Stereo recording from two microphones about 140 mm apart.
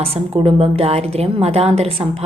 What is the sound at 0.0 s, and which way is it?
A woman's voice, 40° right (ahead or behind).